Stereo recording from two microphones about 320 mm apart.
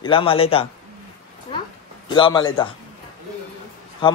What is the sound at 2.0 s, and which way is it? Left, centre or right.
Speech, centre.